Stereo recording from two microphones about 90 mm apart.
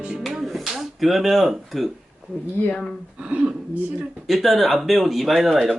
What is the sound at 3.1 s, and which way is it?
Speech, 15° right (ahead or behind).